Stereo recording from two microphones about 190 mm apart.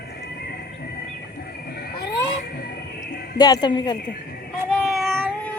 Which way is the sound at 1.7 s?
60° left (ahead or behind).